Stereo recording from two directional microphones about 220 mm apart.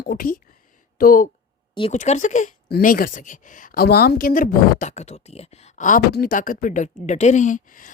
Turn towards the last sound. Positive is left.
turn(degrees=35)  # may be behind; listen again after turning